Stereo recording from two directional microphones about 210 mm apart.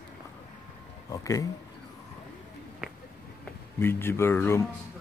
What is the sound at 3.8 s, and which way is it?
Speech, 10° left (ahead or behind).